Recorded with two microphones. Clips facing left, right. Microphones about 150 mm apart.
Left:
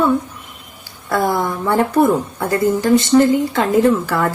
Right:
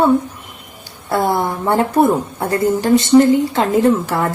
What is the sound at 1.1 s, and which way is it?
Speech, 25° right (ahead or behind).